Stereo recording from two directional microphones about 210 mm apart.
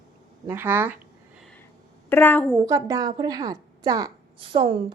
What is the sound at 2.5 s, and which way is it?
A woman's voice, 15° right (ahead or behind).